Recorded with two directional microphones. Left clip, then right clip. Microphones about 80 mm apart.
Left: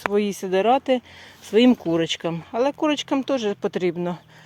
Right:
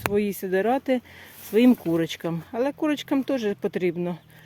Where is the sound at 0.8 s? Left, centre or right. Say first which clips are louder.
Left 3 dB; right.